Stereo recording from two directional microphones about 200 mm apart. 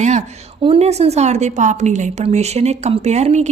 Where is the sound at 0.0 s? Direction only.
35° right (ahead or behind).